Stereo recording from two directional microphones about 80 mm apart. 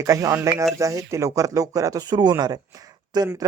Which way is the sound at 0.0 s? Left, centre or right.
Right.